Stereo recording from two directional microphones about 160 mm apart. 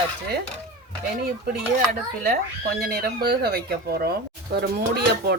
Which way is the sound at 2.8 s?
90° right.